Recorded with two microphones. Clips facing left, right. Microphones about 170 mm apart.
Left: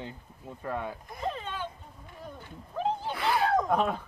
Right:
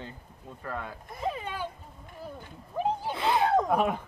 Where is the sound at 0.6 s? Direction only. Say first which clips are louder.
Left 3 dB; 15° left (ahead or behind).